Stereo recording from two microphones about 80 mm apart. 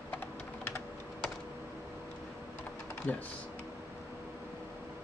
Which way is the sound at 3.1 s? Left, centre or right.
Left.